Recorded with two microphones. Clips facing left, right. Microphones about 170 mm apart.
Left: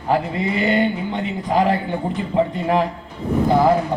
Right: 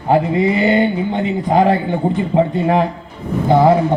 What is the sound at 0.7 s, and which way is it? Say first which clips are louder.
A man's voice: right 4 dB; 30° right (ahead or behind).